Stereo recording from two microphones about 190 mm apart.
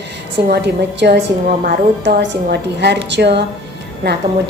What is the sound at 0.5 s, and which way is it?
A woman's voice, 60° right (ahead or behind).